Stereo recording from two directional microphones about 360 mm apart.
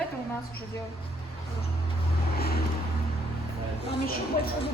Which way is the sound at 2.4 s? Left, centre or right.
Left.